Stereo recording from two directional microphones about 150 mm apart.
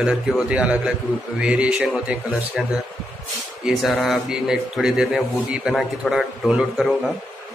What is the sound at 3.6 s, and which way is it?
A man's voice, centre (ahead or behind).